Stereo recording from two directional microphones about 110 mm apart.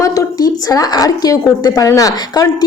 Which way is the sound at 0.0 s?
30° left (ahead or behind).